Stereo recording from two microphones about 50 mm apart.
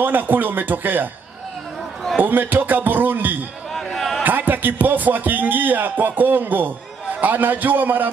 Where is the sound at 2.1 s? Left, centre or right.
Right.